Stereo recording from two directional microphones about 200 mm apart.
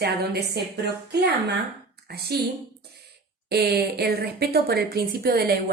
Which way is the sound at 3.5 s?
55° right (ahead or behind).